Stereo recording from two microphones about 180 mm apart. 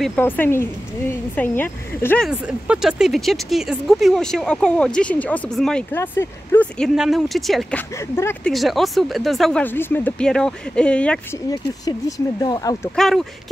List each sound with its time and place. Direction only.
0.0 s speech: 10° left (ahead or behind)
2.2 s speech: 5° right (ahead or behind)
7.0 s speech: centre (ahead or behind)
12.4 s speech: 20° left (ahead or behind)
12.9 s speech: centre (ahead or behind)